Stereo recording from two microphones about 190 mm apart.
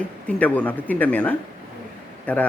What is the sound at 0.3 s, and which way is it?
A man's voice, 5° left (ahead or behind).